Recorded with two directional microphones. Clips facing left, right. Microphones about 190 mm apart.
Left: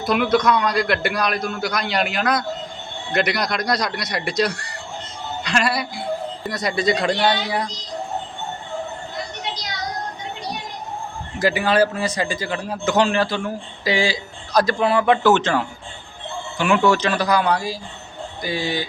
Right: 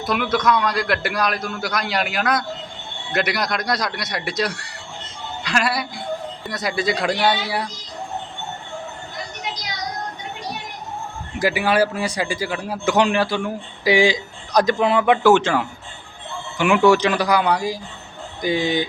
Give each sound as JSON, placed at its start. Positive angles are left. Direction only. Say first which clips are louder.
{"t": 0.0, "sound": "a man's voice", "louder": "left 3 dB", "side_deg": 0}
{"t": 11.3, "sound": "a man's voice", "louder": "left 1 dB", "side_deg": -10}